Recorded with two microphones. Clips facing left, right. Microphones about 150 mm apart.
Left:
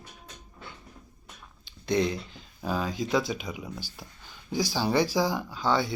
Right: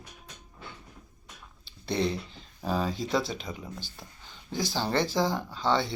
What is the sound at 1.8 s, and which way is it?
Speech, centre (ahead or behind).